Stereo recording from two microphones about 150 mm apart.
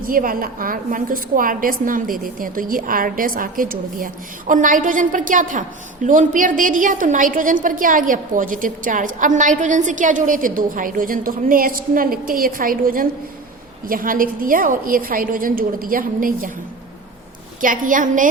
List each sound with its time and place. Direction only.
0.0 s a woman's voice: 70° right (ahead or behind)
17.6 s a woman's voice: 65° right (ahead or behind)